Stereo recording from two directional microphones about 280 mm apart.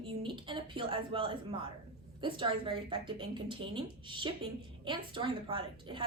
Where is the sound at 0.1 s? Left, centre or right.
Centre.